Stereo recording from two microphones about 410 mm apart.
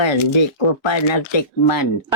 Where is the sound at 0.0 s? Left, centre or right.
Left.